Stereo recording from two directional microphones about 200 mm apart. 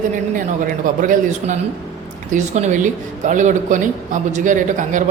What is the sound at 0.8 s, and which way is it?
Speech, 40° right (ahead or behind).